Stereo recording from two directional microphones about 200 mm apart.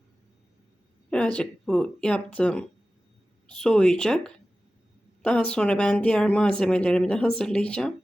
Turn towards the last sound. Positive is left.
turn(degrees=5)  # may be behind; listen again after turning